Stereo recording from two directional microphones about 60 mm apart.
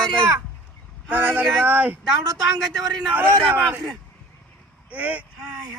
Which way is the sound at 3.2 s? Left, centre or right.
Right.